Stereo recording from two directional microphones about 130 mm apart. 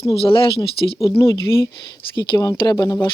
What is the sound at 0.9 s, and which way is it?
Speech, 20° left (ahead or behind).